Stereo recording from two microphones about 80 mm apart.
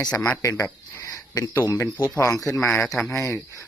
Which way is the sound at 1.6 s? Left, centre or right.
Left.